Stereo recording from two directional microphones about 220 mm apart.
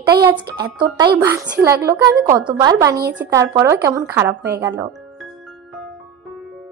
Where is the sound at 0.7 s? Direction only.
20° right (ahead or behind).